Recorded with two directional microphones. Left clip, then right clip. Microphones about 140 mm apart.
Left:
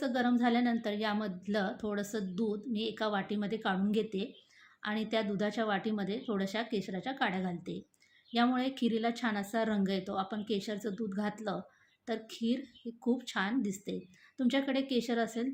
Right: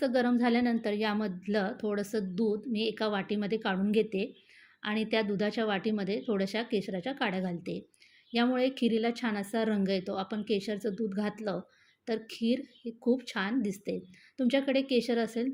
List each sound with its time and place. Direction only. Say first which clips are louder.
0.0 s a woman's voice: right 3 dB; 30° right (ahead or behind)